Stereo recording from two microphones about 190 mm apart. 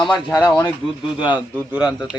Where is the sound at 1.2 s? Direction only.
10° right (ahead or behind).